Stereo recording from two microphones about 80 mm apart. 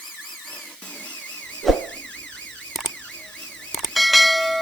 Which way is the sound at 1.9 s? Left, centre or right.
Centre.